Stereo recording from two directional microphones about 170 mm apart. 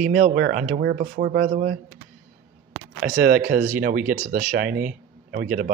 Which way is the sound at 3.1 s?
55° right (ahead or behind).